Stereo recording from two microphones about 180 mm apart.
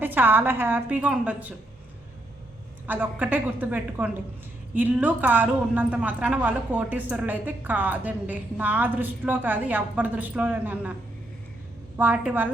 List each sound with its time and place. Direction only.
0.0 s a woman's voice: 10° right (ahead or behind)
2.8 s a woman's voice: 10° right (ahead or behind)
11.9 s a woman's voice: 10° right (ahead or behind)